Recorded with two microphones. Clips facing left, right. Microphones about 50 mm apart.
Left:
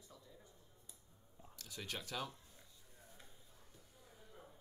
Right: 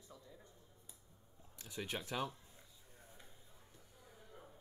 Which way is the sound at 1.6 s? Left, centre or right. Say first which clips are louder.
Right 4 dB; right.